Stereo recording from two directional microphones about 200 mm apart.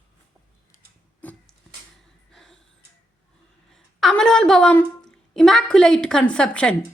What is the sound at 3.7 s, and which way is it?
A woman's voice, centre (ahead or behind).